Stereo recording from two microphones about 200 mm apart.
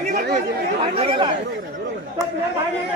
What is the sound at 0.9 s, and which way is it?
Speech, 25° right (ahead or behind).